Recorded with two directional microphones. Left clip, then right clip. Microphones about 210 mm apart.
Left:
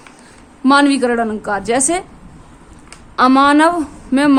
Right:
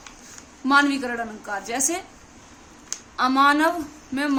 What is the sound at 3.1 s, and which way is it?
Speech, 45° left (ahead or behind).